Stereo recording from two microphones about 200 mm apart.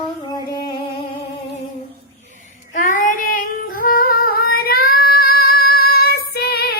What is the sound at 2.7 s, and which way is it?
Child singing, 40° left (ahead or behind).